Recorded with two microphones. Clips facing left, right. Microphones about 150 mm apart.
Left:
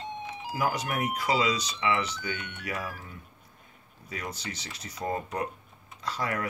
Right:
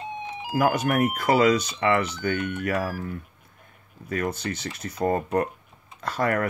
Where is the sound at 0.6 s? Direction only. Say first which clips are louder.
Right 8 dB; 55° right (ahead or behind).